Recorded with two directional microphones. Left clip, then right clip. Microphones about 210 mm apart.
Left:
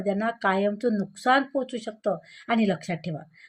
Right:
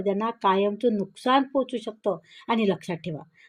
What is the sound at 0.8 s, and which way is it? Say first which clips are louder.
Speech: right 1 dB; 20° right (ahead or behind).